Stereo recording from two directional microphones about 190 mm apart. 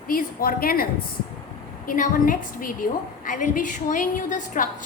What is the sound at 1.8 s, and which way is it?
A woman's voice, 45° left (ahead or behind).